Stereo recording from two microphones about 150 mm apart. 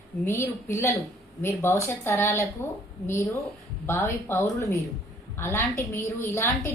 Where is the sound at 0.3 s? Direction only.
15° left (ahead or behind).